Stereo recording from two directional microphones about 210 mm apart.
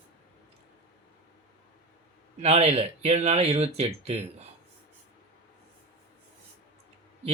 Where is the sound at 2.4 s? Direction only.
30° right (ahead or behind).